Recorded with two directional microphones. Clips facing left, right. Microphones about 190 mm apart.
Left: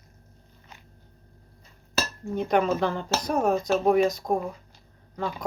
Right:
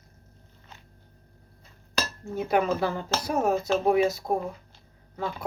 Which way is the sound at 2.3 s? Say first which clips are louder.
Left 1 dB; 5° right (ahead or behind).